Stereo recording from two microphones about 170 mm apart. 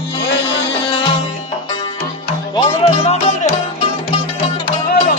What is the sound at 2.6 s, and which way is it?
Music, 40° left (ahead or behind).